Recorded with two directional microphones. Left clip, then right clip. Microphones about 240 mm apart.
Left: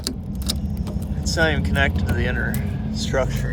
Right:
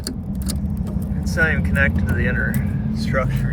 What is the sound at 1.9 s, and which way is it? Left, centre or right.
Speech, centre.